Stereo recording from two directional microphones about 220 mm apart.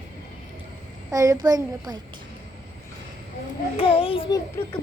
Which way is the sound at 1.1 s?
15° right (ahead or behind).